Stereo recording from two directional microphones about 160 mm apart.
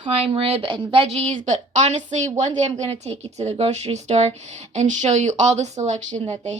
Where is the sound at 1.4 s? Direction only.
50° right (ahead or behind).